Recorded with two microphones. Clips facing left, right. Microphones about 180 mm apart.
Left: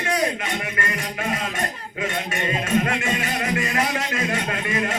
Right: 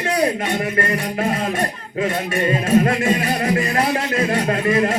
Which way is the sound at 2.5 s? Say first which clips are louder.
Right 6 dB; 35° right (ahead or behind).